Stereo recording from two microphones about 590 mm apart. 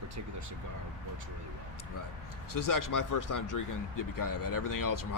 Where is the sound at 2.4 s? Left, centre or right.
Left.